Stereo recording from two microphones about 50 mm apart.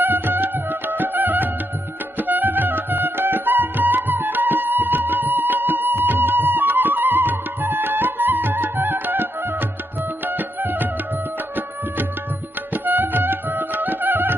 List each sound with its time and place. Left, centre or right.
0.0 s music: right
12.7 s music: right